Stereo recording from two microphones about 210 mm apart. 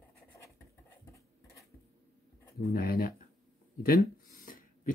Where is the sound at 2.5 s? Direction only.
45° left (ahead or behind).